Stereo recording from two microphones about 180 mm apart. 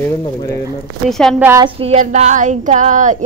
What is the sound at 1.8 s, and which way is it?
Speech, 40° right (ahead or behind).